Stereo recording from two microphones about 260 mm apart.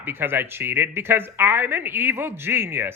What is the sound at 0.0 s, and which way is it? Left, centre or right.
Speech, centre.